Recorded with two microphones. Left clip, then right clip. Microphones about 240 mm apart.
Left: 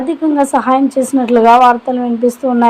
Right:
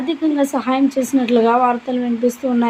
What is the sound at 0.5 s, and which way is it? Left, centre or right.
A woman's voice, centre.